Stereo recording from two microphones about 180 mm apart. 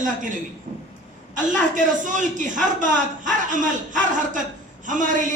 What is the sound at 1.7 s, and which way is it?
Speech, 45° right (ahead or behind).